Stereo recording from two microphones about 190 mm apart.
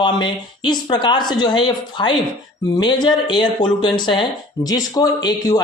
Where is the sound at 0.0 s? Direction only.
25° left (ahead or behind).